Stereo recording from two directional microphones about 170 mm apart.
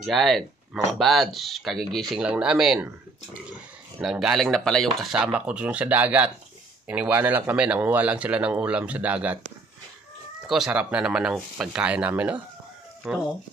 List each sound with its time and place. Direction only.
0.0 s speech: centre (ahead or behind)
4.0 s speech: centre (ahead or behind)
10.4 s speech: centre (ahead or behind)